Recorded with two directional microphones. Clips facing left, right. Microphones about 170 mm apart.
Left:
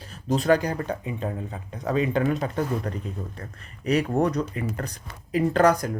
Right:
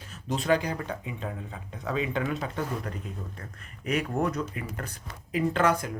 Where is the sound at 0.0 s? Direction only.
35° left (ahead or behind).